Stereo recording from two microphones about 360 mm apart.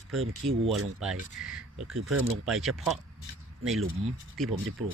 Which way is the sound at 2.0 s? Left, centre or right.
Right.